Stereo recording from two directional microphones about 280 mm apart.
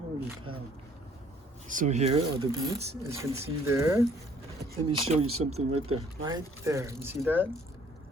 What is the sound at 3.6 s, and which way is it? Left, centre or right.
Speech, centre.